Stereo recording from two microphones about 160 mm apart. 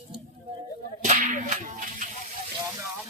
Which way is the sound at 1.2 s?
55° right (ahead or behind).